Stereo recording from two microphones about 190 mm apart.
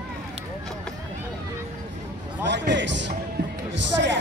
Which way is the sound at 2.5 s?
70° right (ahead or behind).